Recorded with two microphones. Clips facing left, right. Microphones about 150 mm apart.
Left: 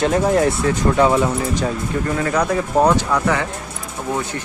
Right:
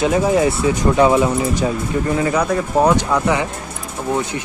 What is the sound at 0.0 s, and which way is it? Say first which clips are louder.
Speech: right 1 dB; 5° right (ahead or behind).